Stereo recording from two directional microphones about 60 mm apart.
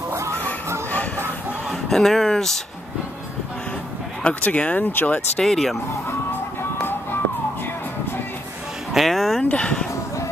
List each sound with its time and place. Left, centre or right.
1.7 s a sound: centre
4.2 s speech: left
5.4 s speech: centre
8.9 s speech: centre
9.4 s speech: centre